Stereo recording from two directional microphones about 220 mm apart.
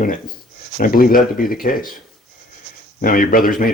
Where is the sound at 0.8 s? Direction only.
40° left (ahead or behind).